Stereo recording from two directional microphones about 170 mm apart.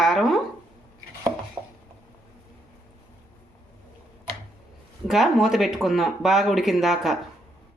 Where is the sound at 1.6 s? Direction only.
20° right (ahead or behind).